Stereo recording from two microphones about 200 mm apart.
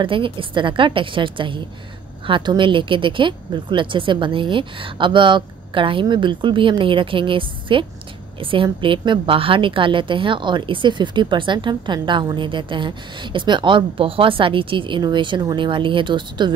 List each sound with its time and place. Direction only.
0.0 s a woman's voice: 25° right (ahead or behind)